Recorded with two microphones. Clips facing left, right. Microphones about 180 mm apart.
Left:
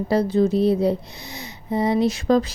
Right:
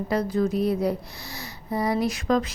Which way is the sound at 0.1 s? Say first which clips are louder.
Left 5 dB; 30° left (ahead or behind).